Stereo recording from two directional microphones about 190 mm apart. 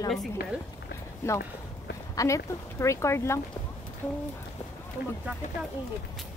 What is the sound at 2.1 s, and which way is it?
Speech, 15° left (ahead or behind).